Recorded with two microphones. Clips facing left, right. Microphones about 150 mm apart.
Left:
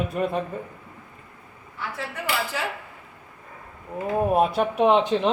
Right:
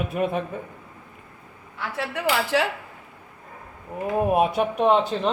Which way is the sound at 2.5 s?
85° right.